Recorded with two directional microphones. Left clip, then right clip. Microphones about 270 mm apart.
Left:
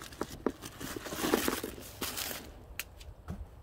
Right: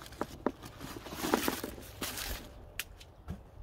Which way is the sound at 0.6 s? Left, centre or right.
Centre.